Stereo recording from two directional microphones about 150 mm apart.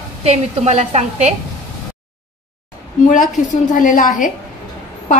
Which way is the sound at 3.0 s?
60° left (ahead or behind).